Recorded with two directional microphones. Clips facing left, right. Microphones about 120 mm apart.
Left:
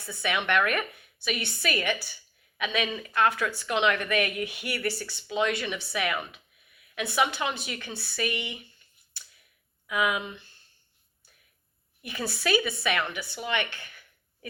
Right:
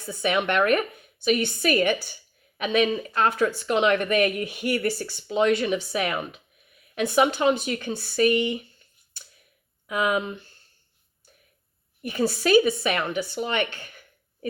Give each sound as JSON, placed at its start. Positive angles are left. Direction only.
{"t": 0.4, "sound": "speech", "side_deg": -35}
{"t": 1.2, "sound": "speech", "side_deg": -45}
{"t": 3.1, "sound": "speech", "side_deg": -30}
{"t": 9.8, "sound": "speech", "side_deg": -35}
{"t": 12.0, "sound": "speech", "side_deg": -45}